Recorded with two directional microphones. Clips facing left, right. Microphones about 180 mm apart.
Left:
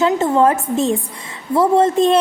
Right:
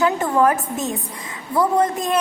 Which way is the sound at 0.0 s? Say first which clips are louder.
Left 3 dB; 25° left (ahead or behind).